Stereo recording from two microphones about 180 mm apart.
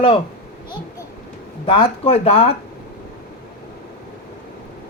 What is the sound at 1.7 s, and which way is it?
Speech, 30° left (ahead or behind).